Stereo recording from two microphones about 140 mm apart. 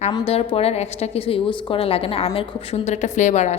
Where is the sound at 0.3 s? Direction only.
45° left (ahead or behind).